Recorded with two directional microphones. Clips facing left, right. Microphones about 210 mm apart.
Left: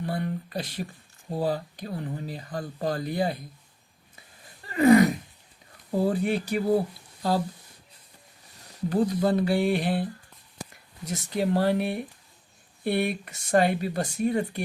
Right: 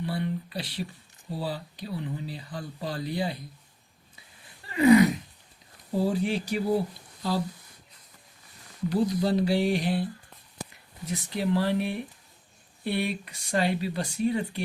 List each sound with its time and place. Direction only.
0.0 s speech: 45° left (ahead or behind)
4.6 s a sound: 45° left (ahead or behind)
6.0 s speech: 55° left (ahead or behind)
8.9 s speech: 50° left (ahead or behind)
11.0 s speech: 45° left (ahead or behind)